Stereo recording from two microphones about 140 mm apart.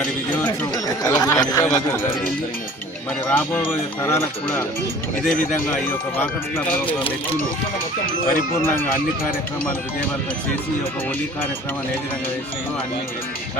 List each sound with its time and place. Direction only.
1.2 s speech: 25° left (ahead or behind)
1.6 s speech: 10° left (ahead or behind)
8.3 s speech: 15° left (ahead or behind)